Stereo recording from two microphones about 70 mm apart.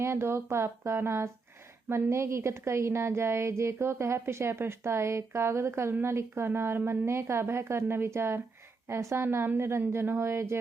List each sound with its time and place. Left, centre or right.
0.0 s a woman's voice: right